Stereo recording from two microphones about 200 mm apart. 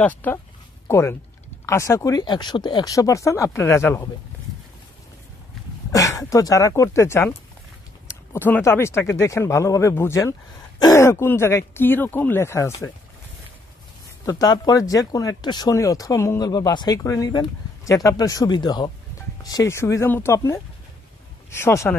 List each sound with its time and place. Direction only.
0.0 s speech: 10° left (ahead or behind)
5.9 s speech: 15° left (ahead or behind)
14.2 s speech: 20° left (ahead or behind)